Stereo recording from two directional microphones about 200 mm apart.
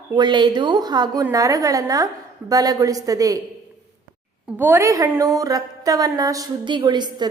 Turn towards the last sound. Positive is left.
turn(degrees=-20)  # may be behind; listen again after turning